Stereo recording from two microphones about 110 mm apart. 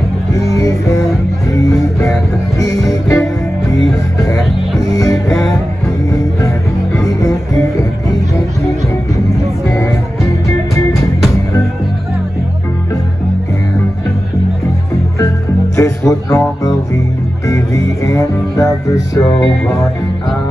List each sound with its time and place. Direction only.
0.3 s music: 30° left (ahead or behind)
4.3 s music: 30° left (ahead or behind)
7.0 s music: 30° left (ahead or behind)
9.7 s music: 30° left (ahead or behind)
15.7 s music: 25° left (ahead or behind)